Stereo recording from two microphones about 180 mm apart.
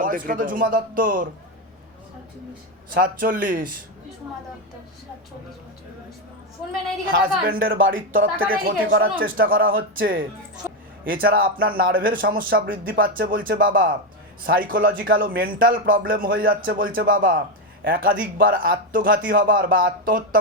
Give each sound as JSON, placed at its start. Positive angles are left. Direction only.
{"t": 0.0, "sound": "speech", "side_deg": -50}
{"t": 2.9, "sound": "speech", "side_deg": -50}
{"t": 7.1, "sound": "speech", "side_deg": -50}
{"t": 7.9, "sound": "speech", "side_deg": -90}
{"t": 8.4, "sound": "speech", "side_deg": -50}